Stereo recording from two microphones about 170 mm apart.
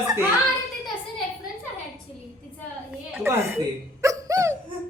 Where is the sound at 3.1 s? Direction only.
15° right (ahead or behind).